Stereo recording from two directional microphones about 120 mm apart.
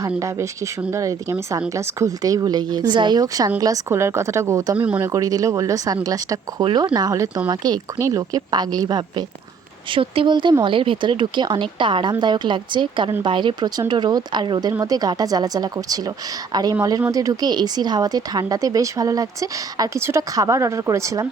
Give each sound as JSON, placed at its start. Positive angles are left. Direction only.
{"t": 0.2, "sound": "speech", "side_deg": -25}
{"t": 5.1, "sound": "a woman's voice", "side_deg": -30}